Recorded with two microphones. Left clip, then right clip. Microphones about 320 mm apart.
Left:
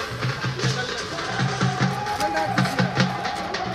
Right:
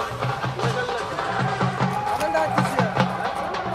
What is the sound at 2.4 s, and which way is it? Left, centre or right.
Music, centre.